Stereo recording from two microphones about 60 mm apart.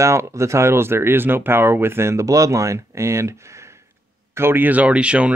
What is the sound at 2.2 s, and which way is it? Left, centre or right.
Speech, right.